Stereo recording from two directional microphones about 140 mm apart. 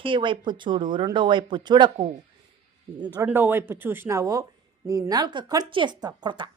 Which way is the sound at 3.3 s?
15° right (ahead or behind).